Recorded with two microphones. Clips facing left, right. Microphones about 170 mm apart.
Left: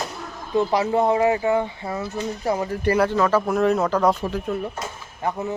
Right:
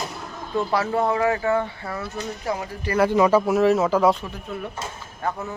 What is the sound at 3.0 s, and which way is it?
Speech, 15° right (ahead or behind).